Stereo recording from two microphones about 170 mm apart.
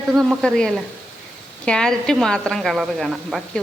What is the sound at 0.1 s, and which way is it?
A woman's voice, centre (ahead or behind).